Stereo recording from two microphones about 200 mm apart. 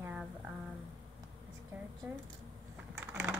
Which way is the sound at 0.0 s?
5° right (ahead or behind).